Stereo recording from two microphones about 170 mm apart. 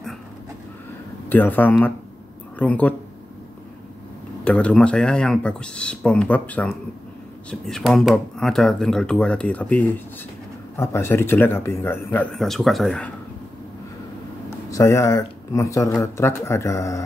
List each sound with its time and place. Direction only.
1.3 s speech: 10° left (ahead or behind)
4.5 s speech: 5° left (ahead or behind)
14.7 s speech: 20° left (ahead or behind)